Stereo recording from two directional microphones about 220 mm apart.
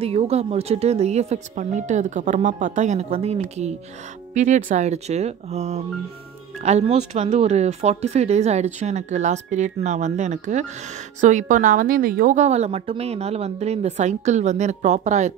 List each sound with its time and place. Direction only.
0.0 s a woman's voice: 30° right (ahead or behind)